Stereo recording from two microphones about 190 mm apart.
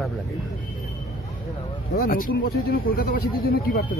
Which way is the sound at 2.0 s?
45° left (ahead or behind).